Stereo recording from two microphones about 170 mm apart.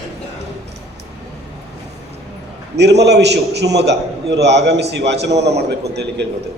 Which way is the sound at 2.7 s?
85° right.